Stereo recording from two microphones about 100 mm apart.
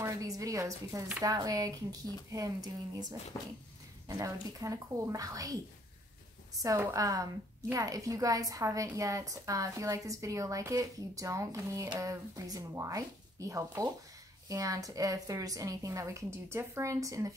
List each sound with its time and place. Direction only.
0.0 s a woman's voice: 35° right (ahead or behind)
4.2 s a woman's voice: 35° right (ahead or behind)
6.6 s a woman's voice: 30° right (ahead or behind)